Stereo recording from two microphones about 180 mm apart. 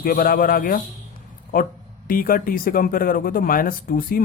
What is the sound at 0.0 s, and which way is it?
Speech, 55° left (ahead or behind).